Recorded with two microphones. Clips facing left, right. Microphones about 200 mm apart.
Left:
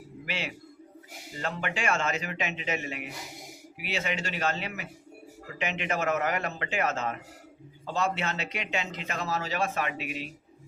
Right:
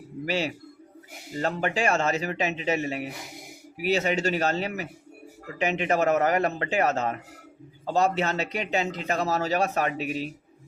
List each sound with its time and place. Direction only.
0.3 s a man's voice: 40° right (ahead or behind)